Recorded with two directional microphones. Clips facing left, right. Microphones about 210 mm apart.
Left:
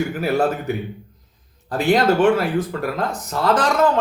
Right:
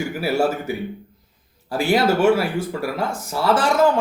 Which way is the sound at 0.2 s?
10° right (ahead or behind).